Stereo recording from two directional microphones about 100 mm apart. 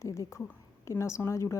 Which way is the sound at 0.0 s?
30° left (ahead or behind).